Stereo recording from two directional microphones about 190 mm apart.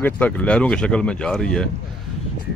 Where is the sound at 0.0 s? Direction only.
10° left (ahead or behind).